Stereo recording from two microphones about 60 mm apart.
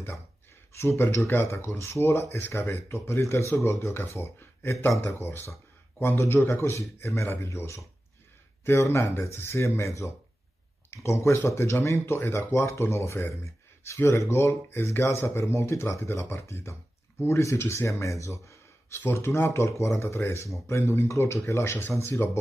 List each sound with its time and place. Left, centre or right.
0.7 s speech: left
10.9 s a sound: left
11.4 s speech: left
18.9 s speech: left